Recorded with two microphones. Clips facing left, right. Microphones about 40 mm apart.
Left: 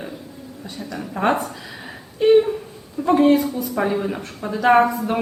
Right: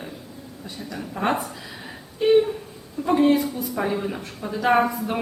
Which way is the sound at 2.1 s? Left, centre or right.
Centre.